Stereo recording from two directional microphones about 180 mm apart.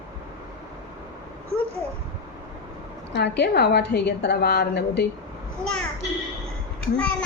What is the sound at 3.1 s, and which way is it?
A woman's voice, 70° left (ahead or behind).